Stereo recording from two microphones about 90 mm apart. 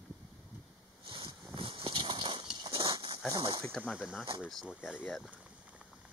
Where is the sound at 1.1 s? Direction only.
75° right (ahead or behind).